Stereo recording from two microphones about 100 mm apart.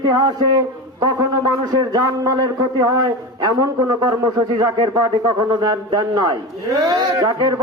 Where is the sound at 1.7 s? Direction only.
40° right (ahead or behind).